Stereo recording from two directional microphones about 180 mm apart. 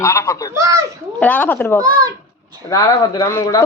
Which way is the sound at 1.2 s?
10° left (ahead or behind).